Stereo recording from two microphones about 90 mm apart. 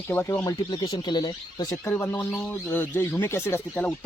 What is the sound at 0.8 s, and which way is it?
Speech, 55° left (ahead or behind).